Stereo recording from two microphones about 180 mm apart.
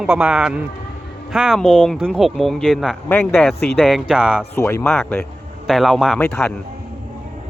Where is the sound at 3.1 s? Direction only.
10° left (ahead or behind).